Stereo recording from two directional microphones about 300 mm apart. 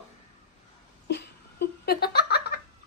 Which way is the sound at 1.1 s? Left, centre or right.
Left.